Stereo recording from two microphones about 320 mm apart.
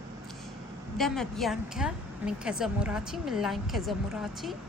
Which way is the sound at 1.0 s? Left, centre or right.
Centre.